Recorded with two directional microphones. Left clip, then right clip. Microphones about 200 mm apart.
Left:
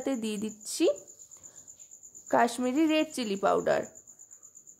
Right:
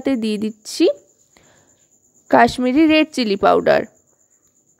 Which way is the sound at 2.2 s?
35° right (ahead or behind).